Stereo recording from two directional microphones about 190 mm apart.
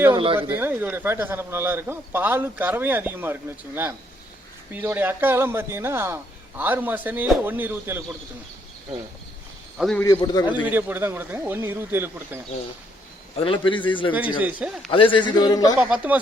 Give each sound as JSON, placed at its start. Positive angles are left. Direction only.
{"t": 0.1, "sound": "speech", "side_deg": -25}
{"t": 0.3, "sound": "a man's voice", "side_deg": -10}
{"t": 4.7, "sound": "a man's voice", "side_deg": -10}
{"t": 9.7, "sound": "a man's voice", "side_deg": 0}
{"t": 10.0, "sound": "a man's voice", "side_deg": 20}
{"t": 10.7, "sound": "a man's voice", "side_deg": -10}
{"t": 13.3, "sound": "a man's voice", "side_deg": 25}
{"t": 14.4, "sound": "a man's voice", "side_deg": -5}
{"t": 14.8, "sound": "a man's voice", "side_deg": 25}
{"t": 15.8, "sound": "speech", "side_deg": -5}